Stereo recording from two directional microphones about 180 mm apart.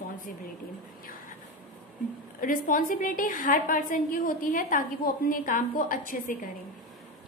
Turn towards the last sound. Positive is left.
turn(degrees=45)  # may be behind; listen again after turning